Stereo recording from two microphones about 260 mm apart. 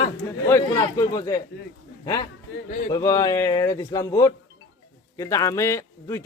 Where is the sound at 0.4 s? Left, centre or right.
Centre.